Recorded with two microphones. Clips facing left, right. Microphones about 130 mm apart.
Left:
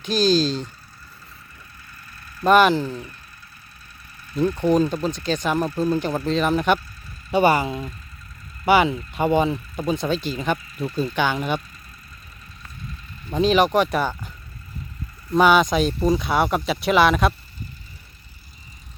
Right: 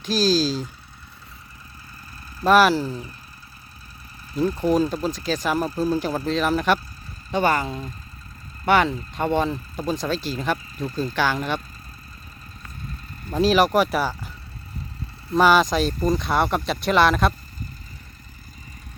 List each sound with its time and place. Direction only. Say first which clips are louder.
0.0 s speech: left 1 dB; centre (ahead or behind)
2.4 s speech: left 1 dB; centre (ahead or behind)
4.6 s speech: left 2 dB; 5° right (ahead or behind)
7.3 s speech: left 3 dB; 10° left (ahead or behind)
13.3 s speech: even; 5° right (ahead or behind)
15.3 s speech: left 1 dB; centre (ahead or behind)